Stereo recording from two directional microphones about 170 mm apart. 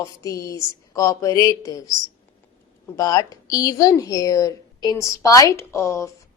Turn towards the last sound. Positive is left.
turn(degrees=15)  # may be behind; listen again after turning